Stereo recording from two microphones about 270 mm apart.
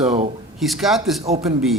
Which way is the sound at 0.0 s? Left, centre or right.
Right.